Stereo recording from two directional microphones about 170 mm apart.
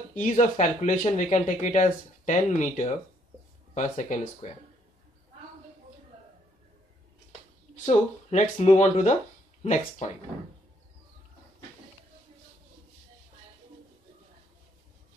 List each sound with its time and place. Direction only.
0.2 s speech: 45° left (ahead or behind)
7.7 s speech: 40° left (ahead or behind)